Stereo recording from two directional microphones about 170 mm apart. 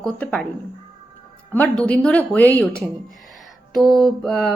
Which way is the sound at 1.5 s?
10° left (ahead or behind).